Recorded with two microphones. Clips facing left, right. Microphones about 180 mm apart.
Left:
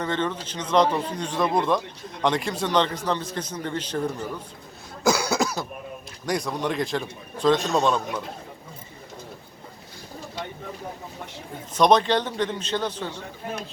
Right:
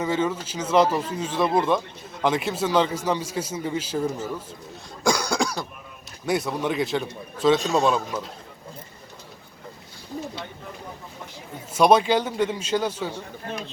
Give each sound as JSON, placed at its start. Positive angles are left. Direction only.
{"t": 0.0, "sound": "a man's voice", "side_deg": -5}
{"t": 5.0, "sound": "cough", "side_deg": 5}
{"t": 6.2, "sound": "a man's voice", "side_deg": -5}
{"t": 11.7, "sound": "a man's voice", "side_deg": -10}